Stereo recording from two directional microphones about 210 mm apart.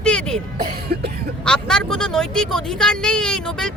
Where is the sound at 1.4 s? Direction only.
5° left (ahead or behind).